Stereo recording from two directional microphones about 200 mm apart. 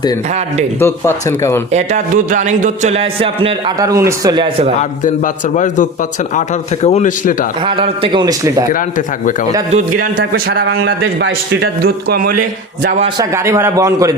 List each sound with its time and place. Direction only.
0.8 s speech: 10° left (ahead or behind)
1.7 s a man's voice: 35° right (ahead or behind); by 4.5 s 20° right (ahead or behind)
4.8 s a man's voice: 40° left (ahead or behind)
7.6 s a man's voice: 25° right (ahead or behind)
8.7 s a man's voice: 40° left (ahead or behind)
10.3 s speech: 50° right (ahead or behind)
11.8 s speech: 50° right (ahead or behind)
13.1 s a man's voice: 15° right (ahead or behind)